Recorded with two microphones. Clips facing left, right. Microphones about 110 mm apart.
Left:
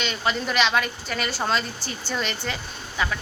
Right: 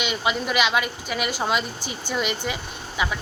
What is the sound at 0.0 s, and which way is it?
Speech, 10° right (ahead or behind).